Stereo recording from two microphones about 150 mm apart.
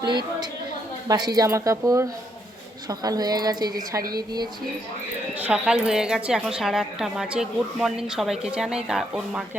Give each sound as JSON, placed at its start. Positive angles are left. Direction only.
{"t": 1.0, "sound": "a woman's voice", "side_deg": -25}
{"t": 5.4, "sound": "a woman's voice", "side_deg": -10}